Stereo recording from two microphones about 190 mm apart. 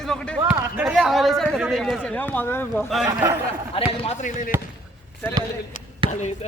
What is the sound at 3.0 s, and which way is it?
Speech, 15° right (ahead or behind).